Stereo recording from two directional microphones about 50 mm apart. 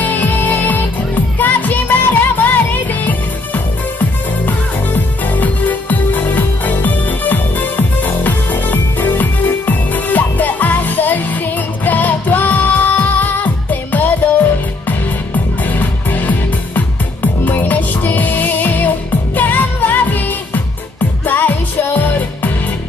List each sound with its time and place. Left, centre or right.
0.0 s music: left